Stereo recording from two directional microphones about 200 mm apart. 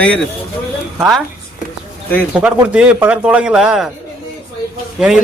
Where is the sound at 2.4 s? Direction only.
5° right (ahead or behind).